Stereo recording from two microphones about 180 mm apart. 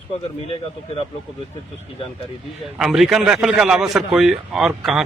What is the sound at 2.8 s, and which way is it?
A man's voice, 5° right (ahead or behind).